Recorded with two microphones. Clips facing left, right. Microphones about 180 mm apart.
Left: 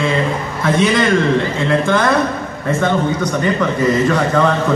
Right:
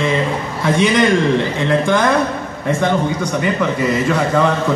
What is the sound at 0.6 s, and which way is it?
A man's voice, 15° right (ahead or behind).